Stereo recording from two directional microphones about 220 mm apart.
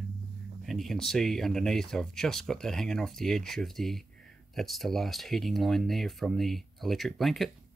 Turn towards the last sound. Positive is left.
turn(degrees=0)  # may be behind; listen again after turning